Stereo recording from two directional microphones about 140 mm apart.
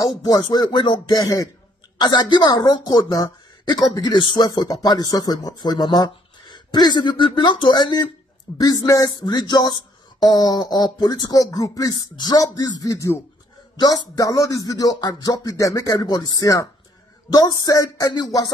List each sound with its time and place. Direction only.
0.0 s speech: 25° left (ahead or behind)